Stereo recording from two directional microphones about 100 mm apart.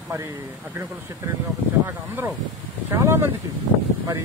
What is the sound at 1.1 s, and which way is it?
Speech, 35° right (ahead or behind).